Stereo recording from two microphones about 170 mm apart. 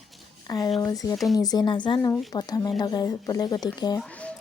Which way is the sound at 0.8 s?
20° left (ahead or behind).